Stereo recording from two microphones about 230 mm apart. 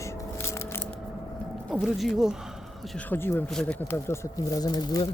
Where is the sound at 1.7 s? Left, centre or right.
Centre.